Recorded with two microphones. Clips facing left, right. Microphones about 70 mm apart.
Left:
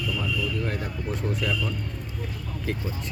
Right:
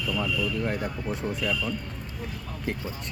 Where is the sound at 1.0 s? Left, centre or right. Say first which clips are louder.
Left 2 dB; centre.